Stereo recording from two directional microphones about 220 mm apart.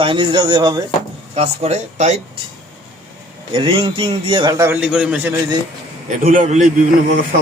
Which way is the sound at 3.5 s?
20° right (ahead or behind).